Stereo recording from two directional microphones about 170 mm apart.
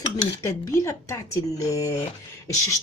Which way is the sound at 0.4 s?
15° left (ahead or behind).